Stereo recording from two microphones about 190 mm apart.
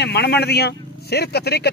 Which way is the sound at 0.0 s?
60° left (ahead or behind).